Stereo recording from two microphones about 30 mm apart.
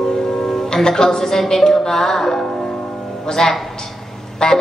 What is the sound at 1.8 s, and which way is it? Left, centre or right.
Music, centre.